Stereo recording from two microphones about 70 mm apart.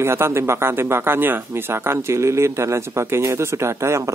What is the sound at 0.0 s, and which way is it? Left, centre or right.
Speech, right.